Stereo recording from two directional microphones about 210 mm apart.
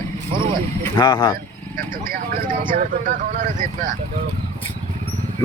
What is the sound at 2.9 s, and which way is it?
Speech, 40° right (ahead or behind).